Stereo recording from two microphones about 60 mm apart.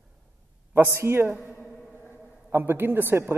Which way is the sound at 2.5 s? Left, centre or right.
Right.